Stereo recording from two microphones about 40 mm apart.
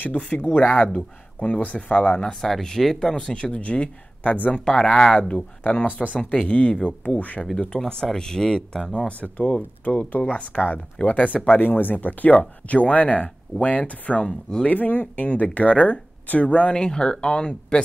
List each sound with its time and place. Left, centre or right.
0.0 s speech: left
2.4 s speech: centre
3.2 s speech: left
4.3 s speech: left
4.6 s speech: centre
6.2 s speech: left
7.0 s speech: left
7.5 s speech: centre
8.9 s speech: left
11.5 s speech: left
14.2 s speech: left
14.7 s speech: left
16.8 s speech: left